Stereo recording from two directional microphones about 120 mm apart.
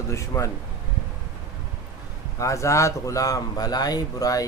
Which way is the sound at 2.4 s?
25° left (ahead or behind).